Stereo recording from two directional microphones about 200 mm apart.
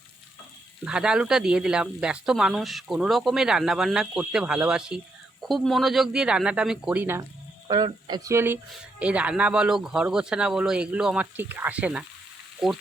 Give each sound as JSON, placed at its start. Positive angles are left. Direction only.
{"t": 0.9, "sound": "speech", "side_deg": -5}
{"t": 7.7, "sound": "speech", "side_deg": -20}